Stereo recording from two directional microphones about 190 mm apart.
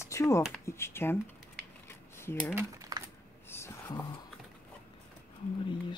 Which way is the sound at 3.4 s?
15° left (ahead or behind).